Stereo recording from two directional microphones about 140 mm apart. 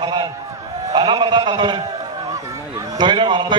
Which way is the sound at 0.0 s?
35° right (ahead or behind).